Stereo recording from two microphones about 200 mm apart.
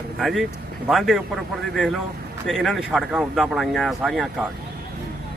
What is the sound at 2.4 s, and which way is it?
Speech, centre (ahead or behind).